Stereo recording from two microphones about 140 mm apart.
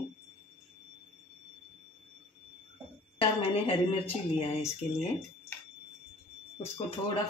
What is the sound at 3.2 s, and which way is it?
Speech, 40° left (ahead or behind).